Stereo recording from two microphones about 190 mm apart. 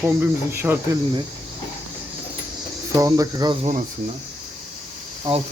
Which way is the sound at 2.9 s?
20° right (ahead or behind).